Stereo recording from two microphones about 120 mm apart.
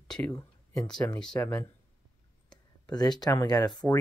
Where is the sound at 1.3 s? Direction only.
25° left (ahead or behind).